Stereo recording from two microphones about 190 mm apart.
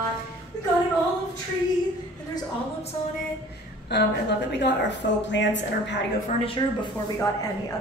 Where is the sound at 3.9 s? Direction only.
65° left (ahead or behind).